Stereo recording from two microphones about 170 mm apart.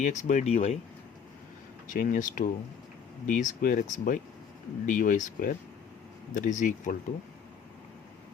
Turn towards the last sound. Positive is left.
turn(degrees=50)  # may be behind; listen again after turning